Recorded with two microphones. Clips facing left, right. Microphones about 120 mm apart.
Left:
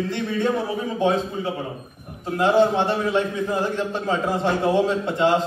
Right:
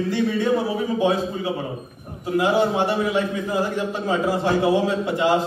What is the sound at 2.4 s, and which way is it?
Speech, 10° right (ahead or behind).